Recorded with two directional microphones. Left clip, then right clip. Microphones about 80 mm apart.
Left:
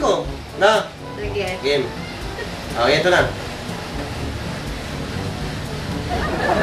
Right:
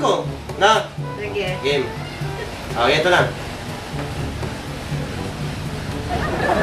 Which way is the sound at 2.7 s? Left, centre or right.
Centre.